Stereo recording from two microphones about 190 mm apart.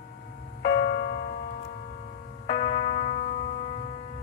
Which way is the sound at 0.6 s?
55° left (ahead or behind).